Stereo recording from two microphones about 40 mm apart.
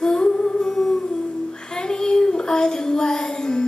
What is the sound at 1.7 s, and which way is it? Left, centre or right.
Child singing, centre.